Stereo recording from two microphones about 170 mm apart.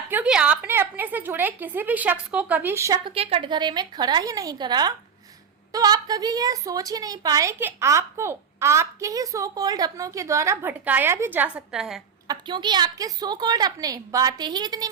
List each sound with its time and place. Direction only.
0.1 s a woman's voice: 5° right (ahead or behind)
3.0 s a woman's voice: 35° right (ahead or behind); by 12.0 s 5° right (ahead or behind)
12.3 s a woman's voice: 25° right (ahead or behind)